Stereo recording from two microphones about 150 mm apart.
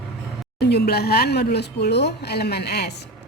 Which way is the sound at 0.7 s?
90° left.